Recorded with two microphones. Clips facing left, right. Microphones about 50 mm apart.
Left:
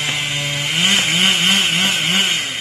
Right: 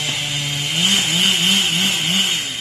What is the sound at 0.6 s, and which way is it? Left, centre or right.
Chainsaw, left.